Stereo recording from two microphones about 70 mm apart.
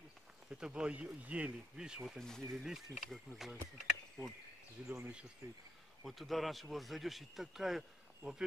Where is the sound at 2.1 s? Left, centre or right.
Centre.